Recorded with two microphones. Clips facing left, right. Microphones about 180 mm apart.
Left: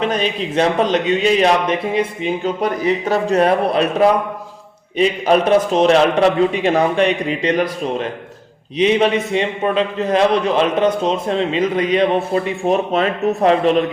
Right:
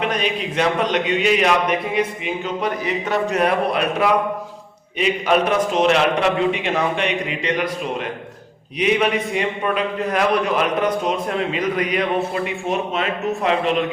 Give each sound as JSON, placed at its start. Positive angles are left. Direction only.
{"t": 0.0, "sound": "a man's voice", "side_deg": 30}